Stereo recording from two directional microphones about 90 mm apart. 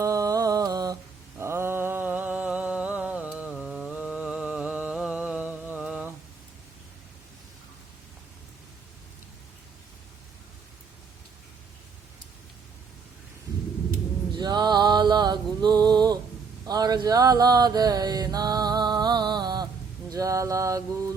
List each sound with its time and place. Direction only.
0.0 s mantra: 40° right (ahead or behind)
1.4 s mantra: 30° right (ahead or behind)
14.3 s mantra: 50° right (ahead or behind)
20.1 s mantra: 40° right (ahead or behind)